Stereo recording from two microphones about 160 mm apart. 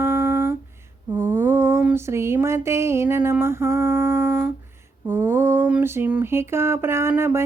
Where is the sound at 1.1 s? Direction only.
15° right (ahead or behind).